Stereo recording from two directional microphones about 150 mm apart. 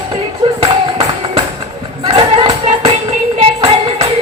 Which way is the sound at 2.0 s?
40° right (ahead or behind).